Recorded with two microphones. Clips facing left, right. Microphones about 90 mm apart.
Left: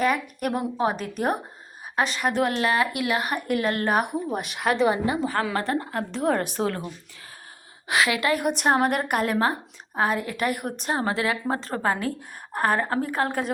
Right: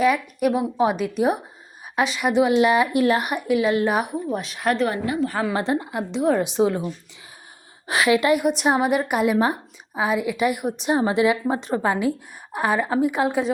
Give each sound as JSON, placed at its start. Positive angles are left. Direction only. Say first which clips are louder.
{"t": 0.0, "sound": "a woman's voice", "louder": "right 5 dB", "side_deg": 0}
{"t": 2.0, "sound": "a woman's voice", "louder": "right 7 dB", "side_deg": -5}
{"t": 2.9, "sound": "a woman's voice", "louder": "right 6 dB", "side_deg": -30}
{"t": 3.4, "sound": "a woman's voice", "louder": "right 5 dB", "side_deg": 0}
{"t": 4.9, "sound": "a woman's voice", "louder": "left 1 dB", "side_deg": 25}
{"t": 5.3, "sound": "a woman's voice", "louder": "right 2 dB", "side_deg": -5}
{"t": 5.5, "sound": "a woman's voice", "louder": "right 2 dB", "side_deg": -15}
{"t": 6.4, "sound": "a woman's voice", "louder": "right 6 dB", "side_deg": -15}
{"t": 7.9, "sound": "a woman's voice", "louder": "right 4 dB", "side_deg": -25}
{"t": 8.4, "sound": "a woman's voice", "louder": "right 2 dB", "side_deg": -5}
{"t": 10.8, "sound": "a woman's voice", "louder": "right 6 dB", "side_deg": -15}